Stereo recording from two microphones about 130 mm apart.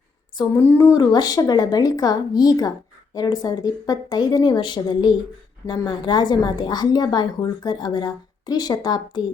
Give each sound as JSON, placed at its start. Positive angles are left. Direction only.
{"t": 0.5, "sound": "a woman's voice", "side_deg": 15}